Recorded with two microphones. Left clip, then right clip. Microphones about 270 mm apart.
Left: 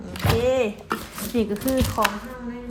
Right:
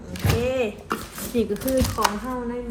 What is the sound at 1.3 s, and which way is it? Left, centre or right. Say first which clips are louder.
Speech: right 1 dB; left.